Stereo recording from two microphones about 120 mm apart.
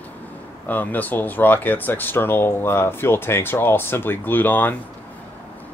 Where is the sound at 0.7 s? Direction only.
15° left (ahead or behind).